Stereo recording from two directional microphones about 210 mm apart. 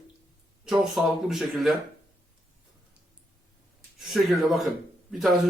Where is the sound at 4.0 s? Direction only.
Centre (ahead or behind).